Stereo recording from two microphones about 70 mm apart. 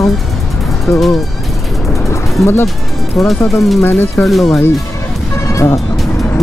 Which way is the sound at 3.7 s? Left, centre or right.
Left.